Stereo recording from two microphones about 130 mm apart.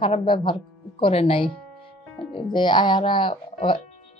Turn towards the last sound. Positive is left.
turn(degrees=40)  # may be behind; listen again after turning